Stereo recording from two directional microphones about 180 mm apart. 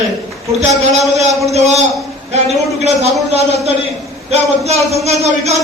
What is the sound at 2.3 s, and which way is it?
A man's voice, 35° right (ahead or behind).